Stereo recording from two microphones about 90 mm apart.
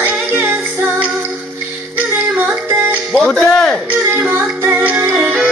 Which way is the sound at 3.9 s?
15° right (ahead or behind).